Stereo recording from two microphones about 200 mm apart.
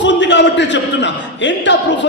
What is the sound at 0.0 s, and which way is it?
A man's voice, 65° left (ahead or behind).